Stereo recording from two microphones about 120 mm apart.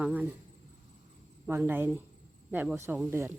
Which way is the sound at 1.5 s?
15° right (ahead or behind).